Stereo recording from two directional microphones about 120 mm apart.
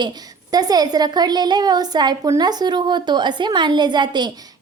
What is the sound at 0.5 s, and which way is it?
A woman's voice, 35° right (ahead or behind).